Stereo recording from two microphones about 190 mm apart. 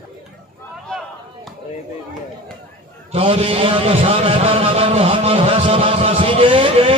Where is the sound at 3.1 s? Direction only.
30° right (ahead or behind).